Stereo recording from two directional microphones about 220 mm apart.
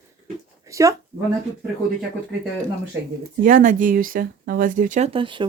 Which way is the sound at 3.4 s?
35° right (ahead or behind).